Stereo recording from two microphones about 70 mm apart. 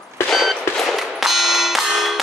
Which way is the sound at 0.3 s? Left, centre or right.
Centre.